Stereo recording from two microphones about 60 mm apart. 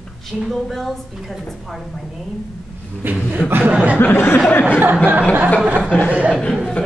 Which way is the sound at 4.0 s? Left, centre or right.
Left.